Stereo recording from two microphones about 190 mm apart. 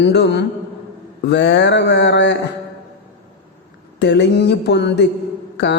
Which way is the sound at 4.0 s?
60° left (ahead or behind).